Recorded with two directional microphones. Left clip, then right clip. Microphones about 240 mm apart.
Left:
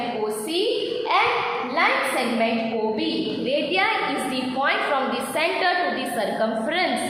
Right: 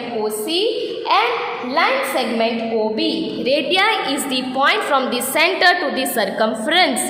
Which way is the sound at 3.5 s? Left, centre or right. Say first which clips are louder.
Right 6 dB; right.